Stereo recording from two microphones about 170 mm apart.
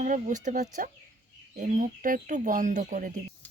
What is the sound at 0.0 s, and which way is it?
Speech, 45° right (ahead or behind).